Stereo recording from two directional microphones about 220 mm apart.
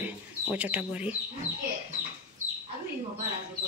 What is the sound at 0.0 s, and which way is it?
Bird, 5° right (ahead or behind).